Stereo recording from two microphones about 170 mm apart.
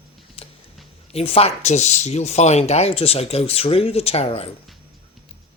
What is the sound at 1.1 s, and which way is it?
Speech, 35° left (ahead or behind).